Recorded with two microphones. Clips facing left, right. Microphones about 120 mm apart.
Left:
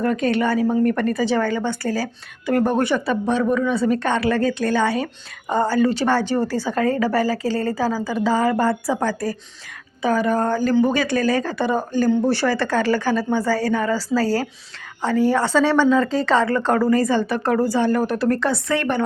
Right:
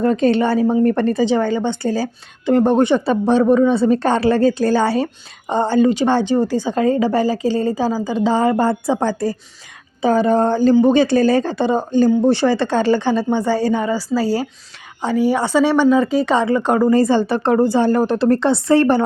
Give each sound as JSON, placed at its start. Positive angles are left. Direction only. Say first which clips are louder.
{"t": 0.0, "sound": "a woman's voice", "louder": "right 4 dB", "side_deg": -30}
{"t": 16.9, "sound": "a woman's voice", "louder": "right 4 dB", "side_deg": -30}